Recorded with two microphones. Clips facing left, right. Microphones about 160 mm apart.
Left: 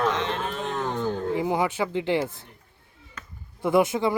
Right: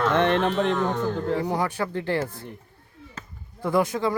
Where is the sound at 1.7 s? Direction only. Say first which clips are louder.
Left 2 dB; 20° left (ahead or behind).